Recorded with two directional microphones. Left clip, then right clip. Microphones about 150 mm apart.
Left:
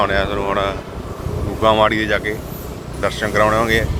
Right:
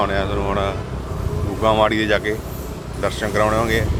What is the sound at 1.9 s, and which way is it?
Speech, 25° right (ahead or behind).